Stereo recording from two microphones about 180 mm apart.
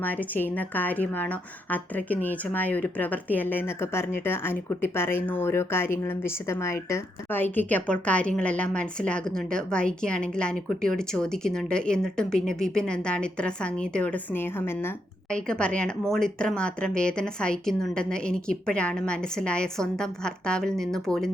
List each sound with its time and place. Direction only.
0.0 s a woman's voice: 10° left (ahead or behind)